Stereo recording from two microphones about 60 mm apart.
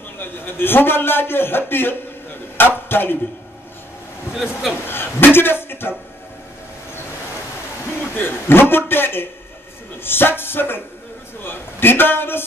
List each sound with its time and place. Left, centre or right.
0.2 s a man's voice: left
4.4 s speech: centre
4.8 s a man's voice: left
8.2 s a man's voice: left